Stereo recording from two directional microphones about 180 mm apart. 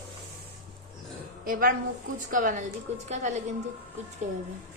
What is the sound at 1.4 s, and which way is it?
A woman's voice, 50° right (ahead or behind).